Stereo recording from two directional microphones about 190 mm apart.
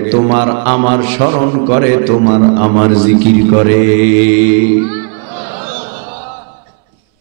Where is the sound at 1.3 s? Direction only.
30° right (ahead or behind).